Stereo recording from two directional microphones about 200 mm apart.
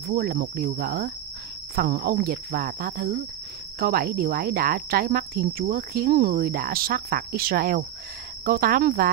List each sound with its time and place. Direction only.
0.1 s speech: 45° right (ahead or behind)